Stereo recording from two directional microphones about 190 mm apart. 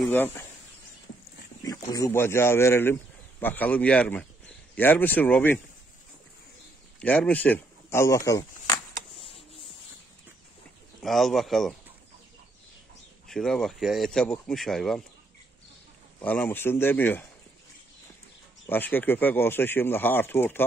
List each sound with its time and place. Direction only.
1.6 s speech: 20° left (ahead or behind)
7.0 s speech: 5° left (ahead or behind)
8.9 s a sound: 30° left (ahead or behind)
11.0 s speech: centre (ahead or behind)
13.3 s speech: centre (ahead or behind)
16.2 s speech: 10° left (ahead or behind)
18.7 s speech: 10° left (ahead or behind)